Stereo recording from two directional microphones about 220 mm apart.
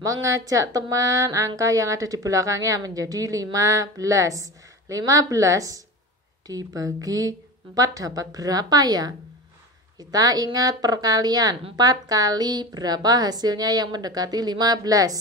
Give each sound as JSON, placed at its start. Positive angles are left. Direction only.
{"t": 0.0, "sound": "speech", "side_deg": -15}